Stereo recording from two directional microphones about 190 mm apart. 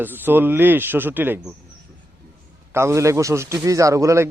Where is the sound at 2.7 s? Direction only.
15° right (ahead or behind).